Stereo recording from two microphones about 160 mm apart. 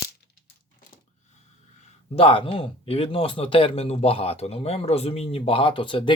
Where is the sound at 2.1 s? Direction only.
35° left (ahead or behind).